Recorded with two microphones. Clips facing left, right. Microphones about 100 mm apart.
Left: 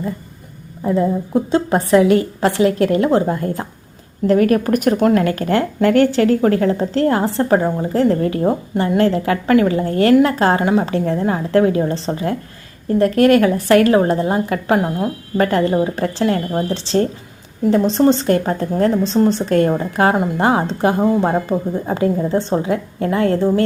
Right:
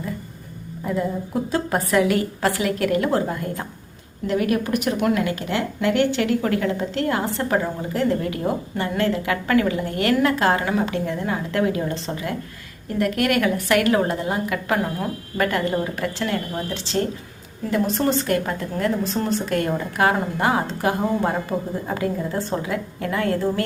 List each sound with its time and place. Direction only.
0.9 s a woman's voice: 25° left (ahead or behind)
4.3 s a woman's voice: 45° left (ahead or behind)
14.8 s a woman's voice: 20° left (ahead or behind)
15.4 s a woman's voice: 30° left (ahead or behind)